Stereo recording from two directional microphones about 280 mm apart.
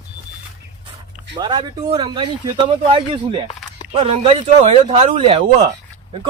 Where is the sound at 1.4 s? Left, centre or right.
Centre.